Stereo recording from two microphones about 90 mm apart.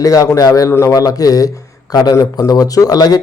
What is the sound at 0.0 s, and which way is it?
A man's voice, 40° left (ahead or behind).